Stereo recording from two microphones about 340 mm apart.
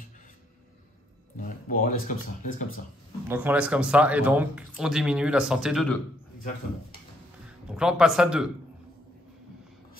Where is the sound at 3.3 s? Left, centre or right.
Centre.